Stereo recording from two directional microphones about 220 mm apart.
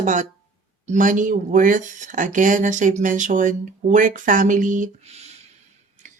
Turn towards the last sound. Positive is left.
turn(degrees=-30)  # may be behind; listen again after turning